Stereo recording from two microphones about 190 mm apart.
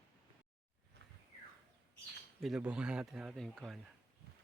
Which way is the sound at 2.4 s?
5° right (ahead or behind).